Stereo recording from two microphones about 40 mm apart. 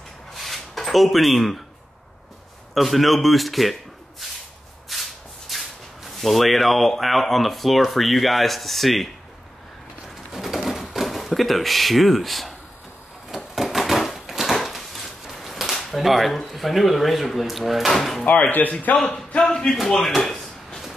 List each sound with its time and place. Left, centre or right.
0.3 s rub: centre
2.7 s speech: centre
4.9 s shuffle: centre
6.0 s speech: centre
10.0 s bird: centre
10.9 s speech: centre
13.3 s a sound: centre
15.8 s speech: centre
18.2 s speech: left
18.5 s a man's voice: left
19.4 s a man's voice: centre
20.0 s drawer open or close: centre